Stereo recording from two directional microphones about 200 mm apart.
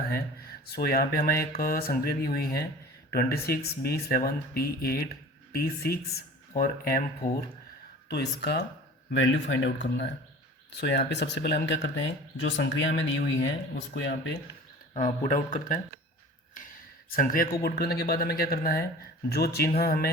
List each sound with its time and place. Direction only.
0.7 s speech: 50° left (ahead or behind)
8.1 s speech: 55° left (ahead or behind)
9.1 s speech: 70° left (ahead or behind)
14.9 s speech: 40° left (ahead or behind)
17.1 s speech: 45° left (ahead or behind)